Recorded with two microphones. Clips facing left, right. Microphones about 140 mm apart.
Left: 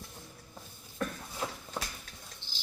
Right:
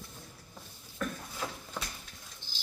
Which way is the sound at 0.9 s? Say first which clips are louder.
Left 1 dB; 20° left (ahead or behind).